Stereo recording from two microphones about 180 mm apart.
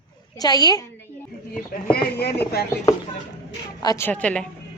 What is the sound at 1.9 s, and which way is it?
Speech, 60° left (ahead or behind).